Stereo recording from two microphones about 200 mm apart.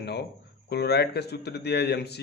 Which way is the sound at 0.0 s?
55° left (ahead or behind).